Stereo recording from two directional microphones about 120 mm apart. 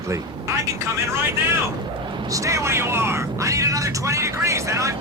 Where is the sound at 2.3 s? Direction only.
25° right (ahead or behind).